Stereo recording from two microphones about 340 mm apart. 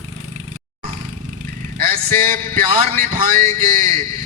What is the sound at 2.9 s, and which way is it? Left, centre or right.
Speech, right.